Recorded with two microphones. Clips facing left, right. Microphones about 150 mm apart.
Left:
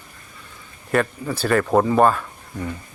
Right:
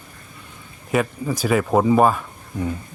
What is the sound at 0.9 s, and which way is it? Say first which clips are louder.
Speech: even; 5° right (ahead or behind).